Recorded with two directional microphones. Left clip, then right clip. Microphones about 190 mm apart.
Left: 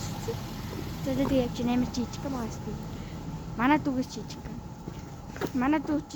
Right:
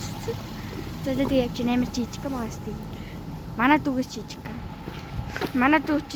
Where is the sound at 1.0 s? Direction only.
5° left (ahead or behind); by 2.0 s 10° right (ahead or behind).